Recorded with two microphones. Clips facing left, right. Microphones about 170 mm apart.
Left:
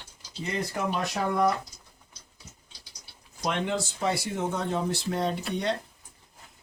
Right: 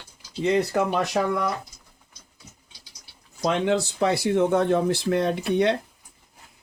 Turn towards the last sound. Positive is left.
turn(degrees=-65)  # may be behind; listen again after turning